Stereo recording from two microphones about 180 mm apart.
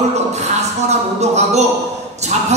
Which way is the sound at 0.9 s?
40° right (ahead or behind).